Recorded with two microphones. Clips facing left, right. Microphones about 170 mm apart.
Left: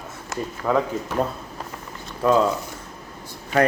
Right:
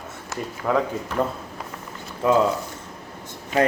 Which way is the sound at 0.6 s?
Centre (ahead or behind).